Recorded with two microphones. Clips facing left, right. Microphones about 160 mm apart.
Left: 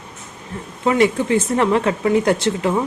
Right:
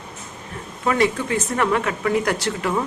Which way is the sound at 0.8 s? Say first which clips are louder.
Left 4 dB; 25° left (ahead or behind).